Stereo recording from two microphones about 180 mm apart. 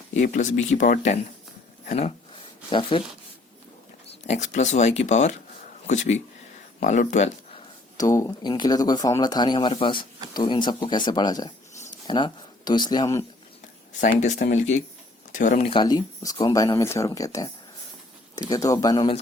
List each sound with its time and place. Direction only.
0.1 s speech: 40° left (ahead or behind)
1.8 s a sound: 40° left (ahead or behind)
4.3 s speech: 40° left (ahead or behind)
7.9 s speech: 15° left (ahead or behind)
14.0 s speech: 45° left (ahead or behind)
15.7 s speech: 25° left (ahead or behind)